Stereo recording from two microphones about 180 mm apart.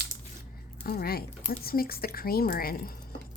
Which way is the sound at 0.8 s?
60° left (ahead or behind).